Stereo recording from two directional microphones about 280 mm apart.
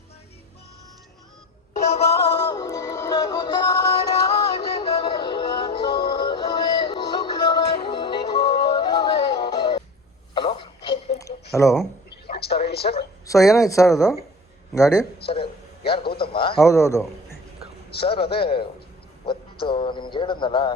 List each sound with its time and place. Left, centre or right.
1.8 s music: left
10.3 s radio: centre
11.5 s speech: centre
12.3 s a sound: left
13.2 s speech: centre
15.2 s a man's voice: left
16.1 s a sound: centre
16.6 s a man's voice: centre
19.2 s a sound: centre